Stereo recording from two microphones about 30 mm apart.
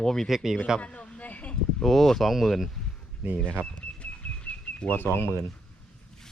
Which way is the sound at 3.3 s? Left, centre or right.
Left.